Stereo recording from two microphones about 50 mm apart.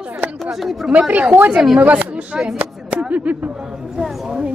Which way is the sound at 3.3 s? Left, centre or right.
Right.